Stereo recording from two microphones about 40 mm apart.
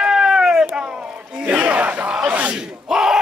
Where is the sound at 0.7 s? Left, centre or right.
Right.